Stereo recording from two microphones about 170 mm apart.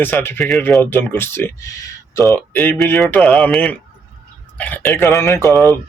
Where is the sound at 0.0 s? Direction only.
10° left (ahead or behind).